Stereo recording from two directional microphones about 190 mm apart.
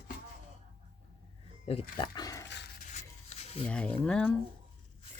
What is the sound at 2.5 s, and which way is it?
Dog, 65° left (ahead or behind).